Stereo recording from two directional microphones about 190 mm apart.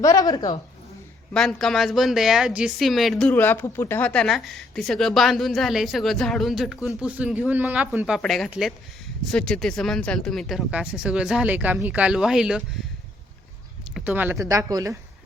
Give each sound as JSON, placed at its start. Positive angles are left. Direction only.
{"t": 0.0, "sound": "a woman's voice", "side_deg": 20}
{"t": 1.3, "sound": "speech", "side_deg": 0}
{"t": 13.9, "sound": "speech", "side_deg": -10}